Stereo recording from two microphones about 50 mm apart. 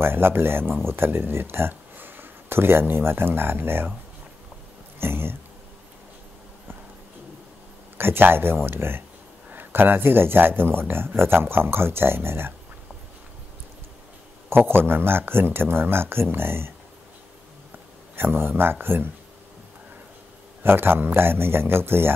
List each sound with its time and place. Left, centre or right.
0.0 s speech: right
4.9 s speech: right
8.0 s speech: right
14.5 s speech: right
18.1 s speech: right
20.6 s speech: right